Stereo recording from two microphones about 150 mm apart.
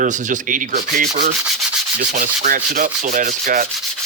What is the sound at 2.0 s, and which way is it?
Rub, 60° right (ahead or behind).